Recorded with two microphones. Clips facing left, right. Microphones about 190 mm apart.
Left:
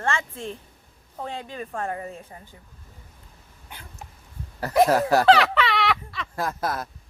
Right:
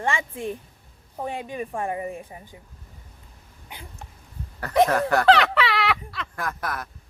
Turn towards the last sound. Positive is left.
turn(degrees=25)  # may be behind; listen again after turning